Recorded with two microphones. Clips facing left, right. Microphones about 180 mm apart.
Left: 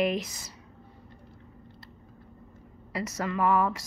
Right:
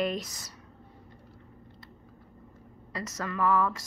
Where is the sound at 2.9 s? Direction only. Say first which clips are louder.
Left 3 dB; 15° left (ahead or behind).